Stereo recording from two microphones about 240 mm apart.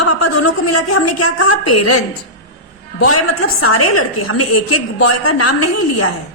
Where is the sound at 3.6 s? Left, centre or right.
Left.